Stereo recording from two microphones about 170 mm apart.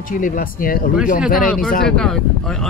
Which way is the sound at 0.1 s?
50° left (ahead or behind).